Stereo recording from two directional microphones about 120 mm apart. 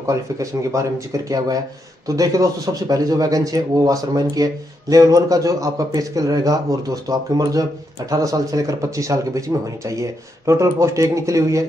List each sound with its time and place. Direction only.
0.0 s a man's voice: 25° right (ahead or behind)